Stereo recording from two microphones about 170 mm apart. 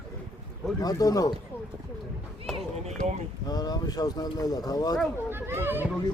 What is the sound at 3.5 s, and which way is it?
Speech, 25° left (ahead or behind).